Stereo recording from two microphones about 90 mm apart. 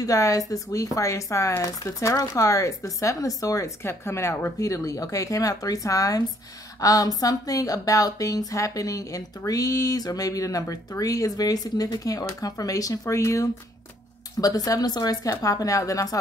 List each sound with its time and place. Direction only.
0.0 s a woman's voice: 35° left (ahead or behind)